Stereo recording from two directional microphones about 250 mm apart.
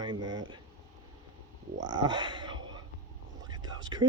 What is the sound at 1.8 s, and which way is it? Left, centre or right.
Speech, centre.